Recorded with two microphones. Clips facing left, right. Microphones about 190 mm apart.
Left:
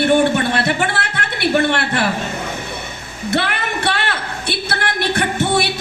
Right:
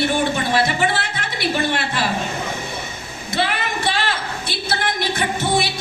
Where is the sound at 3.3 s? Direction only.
65° left (ahead or behind).